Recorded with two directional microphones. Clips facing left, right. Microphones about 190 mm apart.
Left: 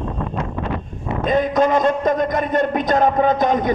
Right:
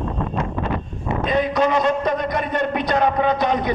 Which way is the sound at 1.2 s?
45° left (ahead or behind).